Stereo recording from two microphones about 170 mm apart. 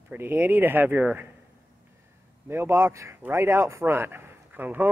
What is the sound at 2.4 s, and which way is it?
Speech, 15° right (ahead or behind).